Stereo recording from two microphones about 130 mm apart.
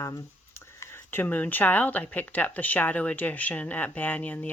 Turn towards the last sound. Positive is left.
turn(degrees=10)  # may be behind; listen again after turning